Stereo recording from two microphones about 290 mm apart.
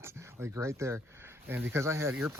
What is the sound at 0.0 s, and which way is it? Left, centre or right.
Speech, centre.